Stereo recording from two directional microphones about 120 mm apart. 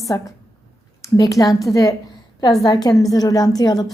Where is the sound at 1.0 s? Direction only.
30° left (ahead or behind).